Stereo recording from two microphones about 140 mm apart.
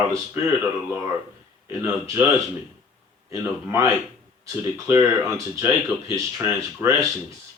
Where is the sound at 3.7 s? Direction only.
20° right (ahead or behind).